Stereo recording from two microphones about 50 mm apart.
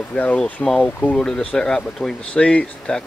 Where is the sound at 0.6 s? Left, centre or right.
Left.